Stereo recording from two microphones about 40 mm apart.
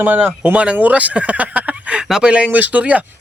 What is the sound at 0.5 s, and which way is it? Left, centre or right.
Speech, right.